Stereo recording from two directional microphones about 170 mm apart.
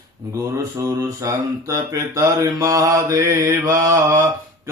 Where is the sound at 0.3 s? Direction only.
20° right (ahead or behind).